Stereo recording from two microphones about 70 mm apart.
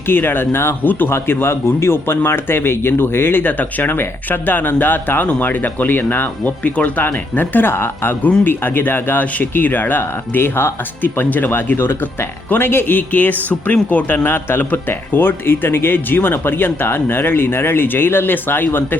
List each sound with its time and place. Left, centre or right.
0.1 s speech: left